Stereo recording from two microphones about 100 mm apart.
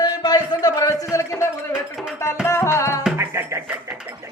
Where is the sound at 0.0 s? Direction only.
40° left (ahead or behind).